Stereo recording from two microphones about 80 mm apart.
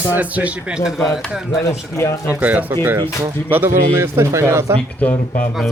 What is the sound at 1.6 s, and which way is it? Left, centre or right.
Speech, left.